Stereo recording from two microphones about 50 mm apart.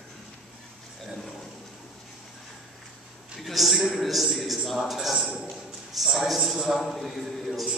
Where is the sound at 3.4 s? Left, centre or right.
Centre.